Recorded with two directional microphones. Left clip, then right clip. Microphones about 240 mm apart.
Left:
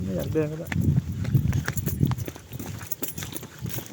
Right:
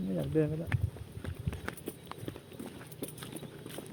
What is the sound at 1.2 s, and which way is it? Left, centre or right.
Clip-clop, left.